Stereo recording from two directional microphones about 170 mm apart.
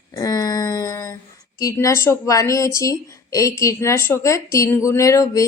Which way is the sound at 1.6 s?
20° left (ahead or behind).